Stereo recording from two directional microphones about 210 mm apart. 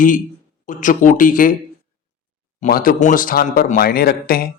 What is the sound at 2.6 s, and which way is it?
Speech, 40° left (ahead or behind).